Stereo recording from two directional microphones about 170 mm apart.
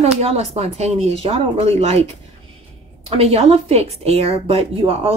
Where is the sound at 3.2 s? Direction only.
40° right (ahead or behind).